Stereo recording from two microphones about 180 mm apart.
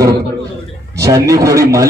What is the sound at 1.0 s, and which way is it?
Speech, 20° right (ahead or behind).